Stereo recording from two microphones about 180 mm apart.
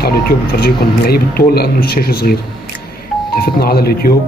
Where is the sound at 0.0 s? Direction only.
60° left (ahead or behind).